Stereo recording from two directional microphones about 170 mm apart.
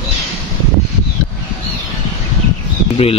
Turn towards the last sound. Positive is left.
turn(degrees=35)  # may be behind; listen again after turning